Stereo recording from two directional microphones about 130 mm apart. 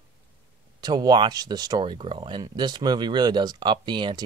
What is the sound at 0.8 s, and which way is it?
Speech, 30° right (ahead or behind).